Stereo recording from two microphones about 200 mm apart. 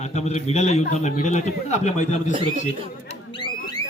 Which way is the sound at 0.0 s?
35° left (ahead or behind).